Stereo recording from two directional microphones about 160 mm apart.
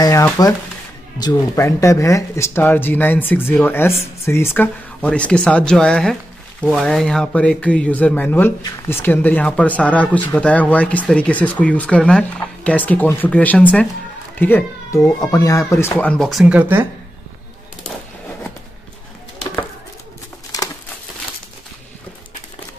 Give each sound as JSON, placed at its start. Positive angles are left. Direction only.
{"t": 0.0, "sound": "speech", "side_deg": 20}